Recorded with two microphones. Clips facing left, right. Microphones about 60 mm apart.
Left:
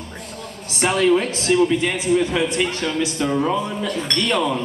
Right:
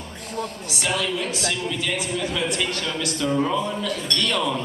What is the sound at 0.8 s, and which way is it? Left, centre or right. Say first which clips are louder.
A man's voice: left 8 dB; left.